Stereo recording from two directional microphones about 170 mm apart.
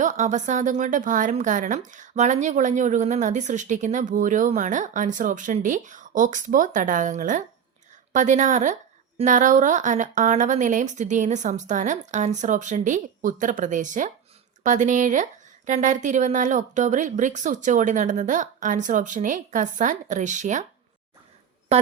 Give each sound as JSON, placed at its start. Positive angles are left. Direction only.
{"t": 0.0, "sound": "a woman's voice", "side_deg": -45}
{"t": 21.7, "sound": "a woman's voice", "side_deg": -40}